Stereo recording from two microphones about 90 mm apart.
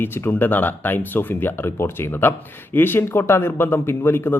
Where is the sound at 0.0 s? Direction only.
20° left (ahead or behind).